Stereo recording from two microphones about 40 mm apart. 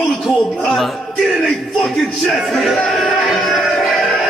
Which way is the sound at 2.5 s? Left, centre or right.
Centre.